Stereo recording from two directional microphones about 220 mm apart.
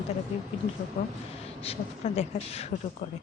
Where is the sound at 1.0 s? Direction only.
30° left (ahead or behind).